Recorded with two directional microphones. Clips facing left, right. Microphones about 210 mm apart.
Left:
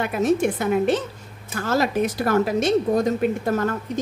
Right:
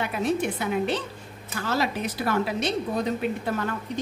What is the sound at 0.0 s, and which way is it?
Speech, 50° left (ahead or behind).